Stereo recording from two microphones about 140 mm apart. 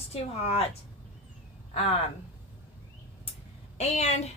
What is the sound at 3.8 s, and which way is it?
Speech, 50° left (ahead or behind).